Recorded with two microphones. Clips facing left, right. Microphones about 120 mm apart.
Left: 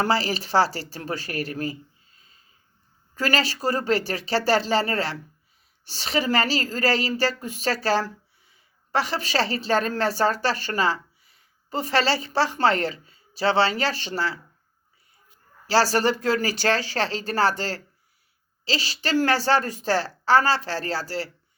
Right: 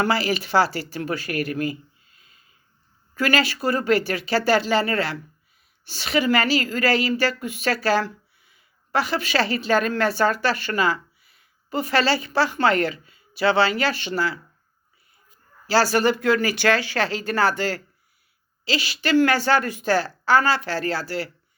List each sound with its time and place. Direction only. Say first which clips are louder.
0.0 s a woman's voice: right 1 dB; 35° left (ahead or behind)
15.6 s a woman's voice: right 1 dB; 35° left (ahead or behind)